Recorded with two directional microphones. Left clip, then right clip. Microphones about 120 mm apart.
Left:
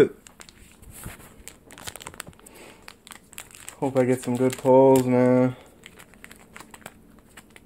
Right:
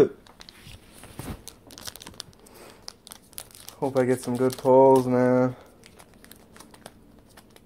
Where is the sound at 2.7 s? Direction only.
20° left (ahead or behind).